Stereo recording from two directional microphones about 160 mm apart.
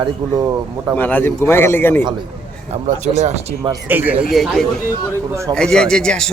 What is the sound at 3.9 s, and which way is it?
Speech, 10° right (ahead or behind).